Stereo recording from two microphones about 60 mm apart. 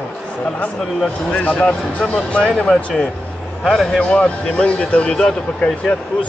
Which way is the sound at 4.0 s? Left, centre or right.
Centre.